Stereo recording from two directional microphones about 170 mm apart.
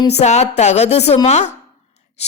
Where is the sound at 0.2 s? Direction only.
40° left (ahead or behind).